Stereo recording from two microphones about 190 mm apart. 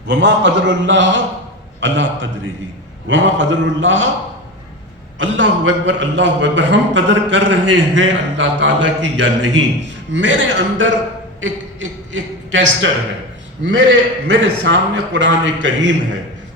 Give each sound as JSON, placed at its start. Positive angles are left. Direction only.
{"t": 0.1, "sound": "a man's voice", "side_deg": -70}
{"t": 5.2, "sound": "a man's voice", "side_deg": -70}